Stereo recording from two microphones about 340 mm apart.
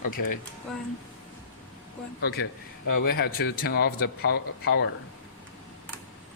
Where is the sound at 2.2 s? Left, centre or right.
Left.